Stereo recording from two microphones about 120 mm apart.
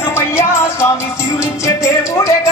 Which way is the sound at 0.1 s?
20° left (ahead or behind).